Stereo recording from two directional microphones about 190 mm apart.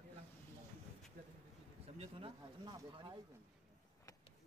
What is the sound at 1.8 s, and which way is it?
Speech, 30° right (ahead or behind).